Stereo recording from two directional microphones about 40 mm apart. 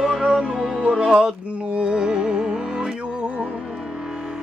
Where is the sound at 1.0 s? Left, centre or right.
Right.